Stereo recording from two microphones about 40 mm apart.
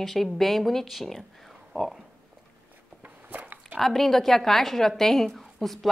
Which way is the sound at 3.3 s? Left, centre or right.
Right.